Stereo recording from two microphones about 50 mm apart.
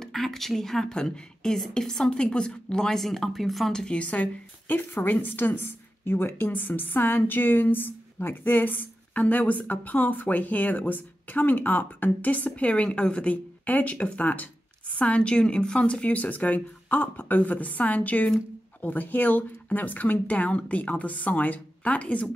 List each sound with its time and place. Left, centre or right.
0.0 s speech: centre
3.8 s a woman's voice: left